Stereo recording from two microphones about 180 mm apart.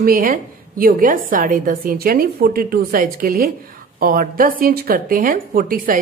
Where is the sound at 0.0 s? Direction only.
50° right (ahead or behind).